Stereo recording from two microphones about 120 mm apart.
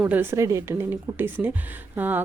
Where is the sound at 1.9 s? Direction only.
15° right (ahead or behind).